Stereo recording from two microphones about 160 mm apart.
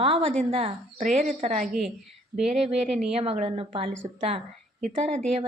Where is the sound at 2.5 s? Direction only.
40° right (ahead or behind).